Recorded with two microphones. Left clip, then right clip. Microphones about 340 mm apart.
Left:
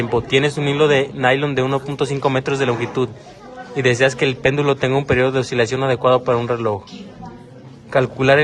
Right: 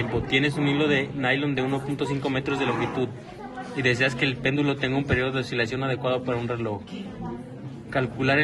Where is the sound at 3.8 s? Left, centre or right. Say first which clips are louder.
Left 7 dB; left.